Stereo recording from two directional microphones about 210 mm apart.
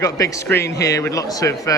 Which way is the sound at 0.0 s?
15° left (ahead or behind).